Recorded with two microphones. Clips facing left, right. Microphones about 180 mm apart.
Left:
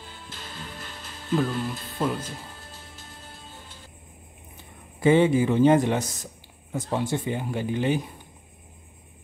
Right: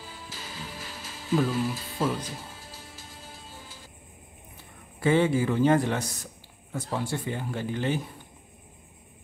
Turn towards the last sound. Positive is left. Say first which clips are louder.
# left 4 dB
turn(degrees=15)  # may be behind; listen again after turning